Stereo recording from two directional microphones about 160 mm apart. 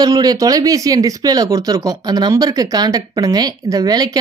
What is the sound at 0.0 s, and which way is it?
Speech, 25° right (ahead or behind).